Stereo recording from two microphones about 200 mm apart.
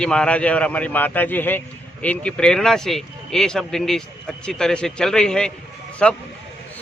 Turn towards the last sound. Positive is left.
turn(degrees=5)  # may be behind; listen again after turning